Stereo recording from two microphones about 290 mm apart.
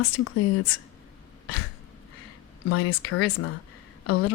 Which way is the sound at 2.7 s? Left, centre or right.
Left.